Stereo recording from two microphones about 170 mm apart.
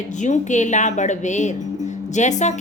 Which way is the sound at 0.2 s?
45° left (ahead or behind).